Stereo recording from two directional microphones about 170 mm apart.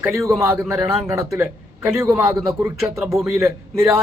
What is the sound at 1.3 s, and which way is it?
Speech, 15° right (ahead or behind).